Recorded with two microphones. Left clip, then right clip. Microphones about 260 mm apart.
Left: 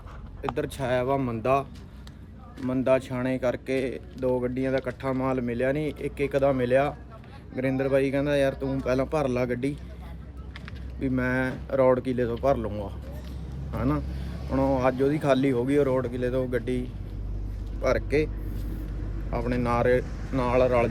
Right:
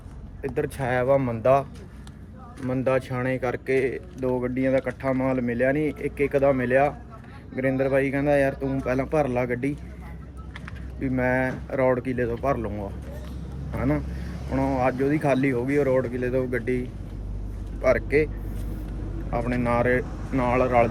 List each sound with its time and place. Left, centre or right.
0.5 s speech: centre
2.6 s speech: left
11.0 s speech: centre
14.5 s speech: left
17.8 s speech: centre
19.3 s speech: left